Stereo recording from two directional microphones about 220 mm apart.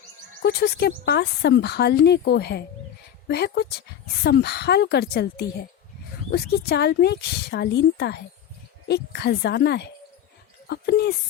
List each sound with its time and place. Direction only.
0.4 s speech: 45° left (ahead or behind)